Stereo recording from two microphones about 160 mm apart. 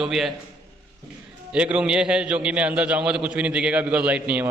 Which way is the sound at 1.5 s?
5° right (ahead or behind).